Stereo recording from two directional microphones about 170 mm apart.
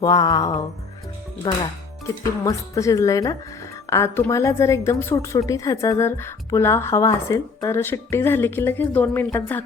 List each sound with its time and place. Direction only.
0.0 s a woman's voice: 20° left (ahead or behind)